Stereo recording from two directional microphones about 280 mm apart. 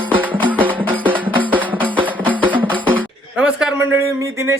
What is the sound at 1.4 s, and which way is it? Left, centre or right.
Music, centre.